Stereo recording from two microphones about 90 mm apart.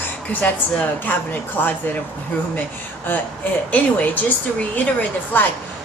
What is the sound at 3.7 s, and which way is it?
Speech, 15° left (ahead or behind).